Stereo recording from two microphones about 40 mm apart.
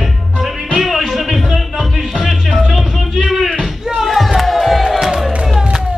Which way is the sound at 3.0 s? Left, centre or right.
Centre.